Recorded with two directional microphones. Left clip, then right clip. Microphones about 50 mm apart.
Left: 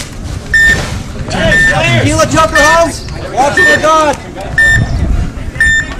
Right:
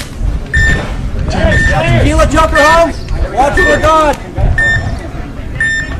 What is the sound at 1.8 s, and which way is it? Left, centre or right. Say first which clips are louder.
Speech: left 2 dB; left.